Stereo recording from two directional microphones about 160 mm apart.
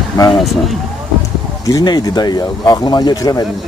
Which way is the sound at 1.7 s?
25° left (ahead or behind).